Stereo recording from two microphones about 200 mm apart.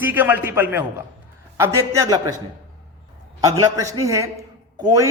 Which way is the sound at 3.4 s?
15° right (ahead or behind).